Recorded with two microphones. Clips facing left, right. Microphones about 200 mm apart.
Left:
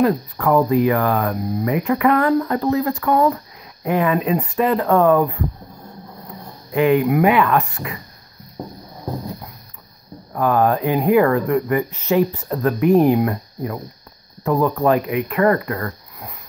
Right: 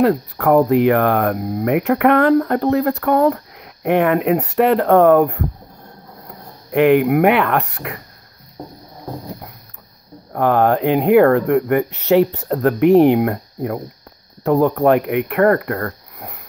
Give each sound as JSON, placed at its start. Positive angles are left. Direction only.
{"t": 0.0, "sound": "speech", "side_deg": -65}
{"t": 6.7, "sound": "speech", "side_deg": -65}
{"t": 10.3, "sound": "speech", "side_deg": -70}
{"t": 14.4, "sound": "speech", "side_deg": -65}